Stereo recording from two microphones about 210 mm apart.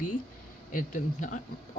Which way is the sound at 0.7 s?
40° left (ahead or behind).